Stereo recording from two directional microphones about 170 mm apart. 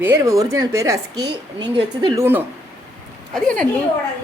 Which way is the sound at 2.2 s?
15° right (ahead or behind).